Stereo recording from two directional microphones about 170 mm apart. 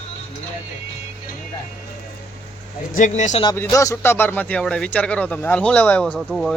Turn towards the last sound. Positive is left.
turn(degrees=0)  # may be behind; listen again after turning